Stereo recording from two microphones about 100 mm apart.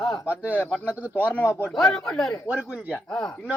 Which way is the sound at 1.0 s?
15° right (ahead or behind).